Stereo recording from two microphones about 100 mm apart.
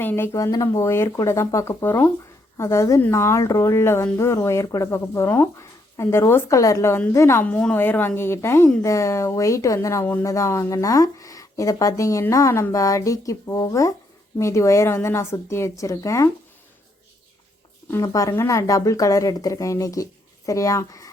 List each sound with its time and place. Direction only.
0.0 s a woman's voice: 20° left (ahead or behind)
0.3 s speech: 35° left (ahead or behind)
1.8 s a woman's voice: 20° left (ahead or behind)
7.4 s a woman's voice: 15° left (ahead or behind); by 16.3 s 30° left (ahead or behind)
18.0 s speech: 35° left (ahead or behind)